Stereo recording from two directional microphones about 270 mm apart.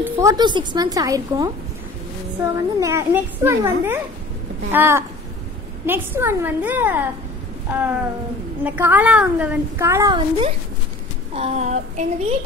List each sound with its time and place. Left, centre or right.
0.1 s a woman's voice: centre
8.6 s a woman's voice: centre; by 12.4 s right